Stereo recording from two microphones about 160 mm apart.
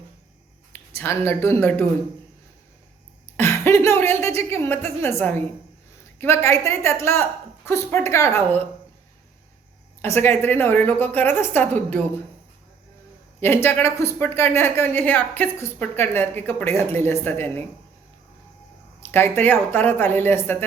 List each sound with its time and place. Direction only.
0.7 s speech: 15° left (ahead or behind)
3.3 s a sound: 15° left (ahead or behind)
6.1 s a woman's voice: 15° left (ahead or behind)
10.0 s a woman's voice: 15° left (ahead or behind)
13.4 s a woman's voice: 15° left (ahead or behind)
19.1 s a woman's voice: 15° left (ahead or behind)